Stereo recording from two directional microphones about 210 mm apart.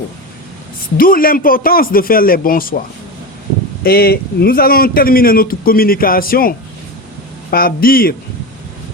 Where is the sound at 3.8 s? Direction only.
45° left (ahead or behind).